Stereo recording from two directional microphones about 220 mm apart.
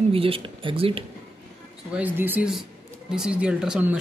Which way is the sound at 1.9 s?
5° right (ahead or behind).